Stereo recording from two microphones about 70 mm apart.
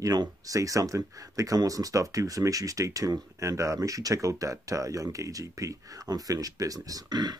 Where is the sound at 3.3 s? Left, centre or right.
Right.